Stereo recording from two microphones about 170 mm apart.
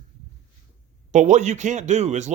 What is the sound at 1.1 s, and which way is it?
Speech, 45° right (ahead or behind).